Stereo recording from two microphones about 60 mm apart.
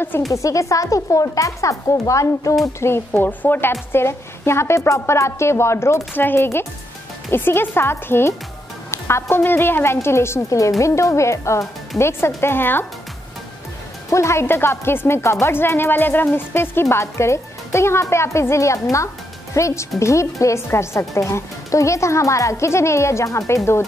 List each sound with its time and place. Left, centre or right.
0.3 s a woman's voice: left
2.6 s a woman's voice: left
3.1 s speech: left
3.9 s a woman's voice: left
6.1 s a woman's voice: left
10.8 s a woman's voice: left
12.0 s a woman's voice: left
14.1 s a woman's voice: left
14.4 s speech: left
16.9 s a woman's voice: left